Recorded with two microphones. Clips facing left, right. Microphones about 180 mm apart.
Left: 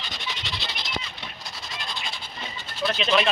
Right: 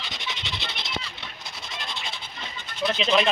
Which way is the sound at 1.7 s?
20° right (ahead or behind).